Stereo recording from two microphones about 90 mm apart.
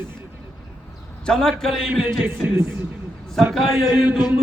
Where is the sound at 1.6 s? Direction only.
5° left (ahead or behind).